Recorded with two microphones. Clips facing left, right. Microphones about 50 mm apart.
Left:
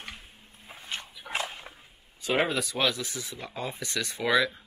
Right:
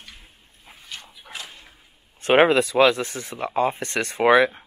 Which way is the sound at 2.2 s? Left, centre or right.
Right.